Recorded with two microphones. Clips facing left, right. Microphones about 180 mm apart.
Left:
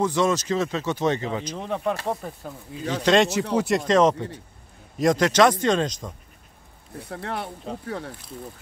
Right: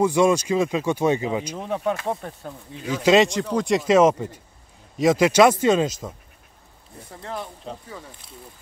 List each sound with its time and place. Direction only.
0.0 s speech: 10° right (ahead or behind)
3.5 s speech: 5° left (ahead or behind)
3.8 s speech: 10° right (ahead or behind)
7.1 s speech: 70° left (ahead or behind)